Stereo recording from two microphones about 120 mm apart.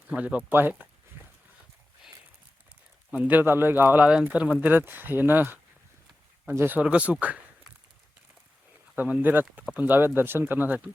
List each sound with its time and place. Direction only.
0.1 s speech: 10° right (ahead or behind)
3.1 s speech: 15° right (ahead or behind)
9.0 s speech: 10° right (ahead or behind)